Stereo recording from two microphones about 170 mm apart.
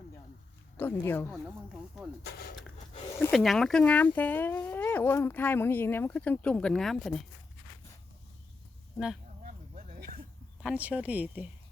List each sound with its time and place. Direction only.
0.8 s speech: 10° left (ahead or behind)
1.3 s speech: centre (ahead or behind)
2.2 s speech: 65° left (ahead or behind)
3.3 s speech: centre (ahead or behind)
9.4 s a sound: 50° right (ahead or behind)
10.6 s speech: 5° right (ahead or behind)